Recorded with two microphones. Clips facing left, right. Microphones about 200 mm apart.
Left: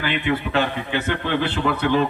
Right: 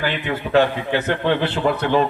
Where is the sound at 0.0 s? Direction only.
45° right (ahead or behind).